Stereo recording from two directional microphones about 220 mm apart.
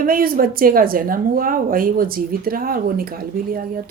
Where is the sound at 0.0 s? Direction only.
40° right (ahead or behind).